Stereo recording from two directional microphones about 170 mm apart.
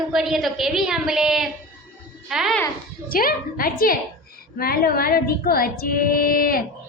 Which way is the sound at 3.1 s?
60° left (ahead or behind).